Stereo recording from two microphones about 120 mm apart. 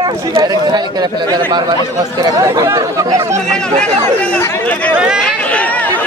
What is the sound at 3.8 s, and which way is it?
Speech, 70° right (ahead or behind).